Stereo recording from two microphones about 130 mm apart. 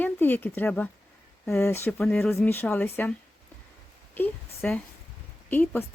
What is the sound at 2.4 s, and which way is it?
Speech, 15° left (ahead or behind).